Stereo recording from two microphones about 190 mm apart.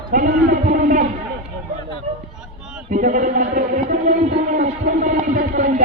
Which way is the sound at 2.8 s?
40° right (ahead or behind).